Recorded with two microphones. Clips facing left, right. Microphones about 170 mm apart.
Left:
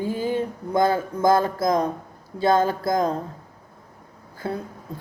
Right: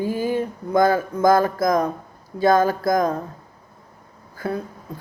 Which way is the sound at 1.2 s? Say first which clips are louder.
Right 2 dB; 25° left (ahead or behind).